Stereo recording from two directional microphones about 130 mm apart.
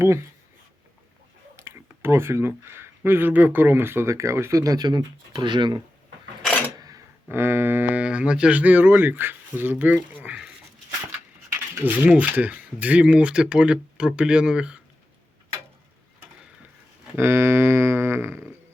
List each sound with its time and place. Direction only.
0.0 s speech: 20° right (ahead or behind)
1.5 s speech: 20° right (ahead or behind)
7.3 s speech: 15° right (ahead or behind)
11.5 s speech: 15° right (ahead or behind)
17.2 s a sound: 20° right (ahead or behind)